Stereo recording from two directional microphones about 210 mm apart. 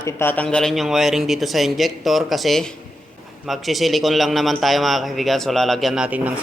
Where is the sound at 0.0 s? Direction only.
10° left (ahead or behind).